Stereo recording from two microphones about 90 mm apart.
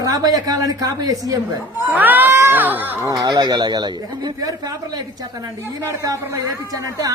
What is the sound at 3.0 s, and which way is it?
A man's voice, 50° right (ahead or behind).